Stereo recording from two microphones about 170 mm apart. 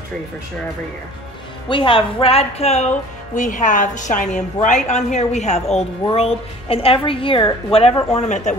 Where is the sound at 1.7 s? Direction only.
30° left (ahead or behind).